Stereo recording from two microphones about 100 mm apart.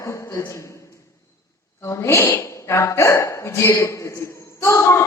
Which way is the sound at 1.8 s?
25° left (ahead or behind).